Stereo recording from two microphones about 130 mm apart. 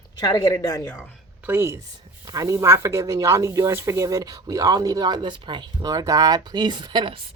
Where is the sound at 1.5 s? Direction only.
20° right (ahead or behind); by 7.2 s 40° right (ahead or behind).